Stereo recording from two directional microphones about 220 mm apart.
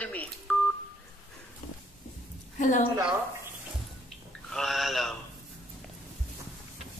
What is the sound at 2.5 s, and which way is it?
Speech, 35° left (ahead or behind).